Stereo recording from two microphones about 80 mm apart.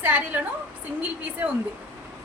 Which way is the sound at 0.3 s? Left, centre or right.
Right.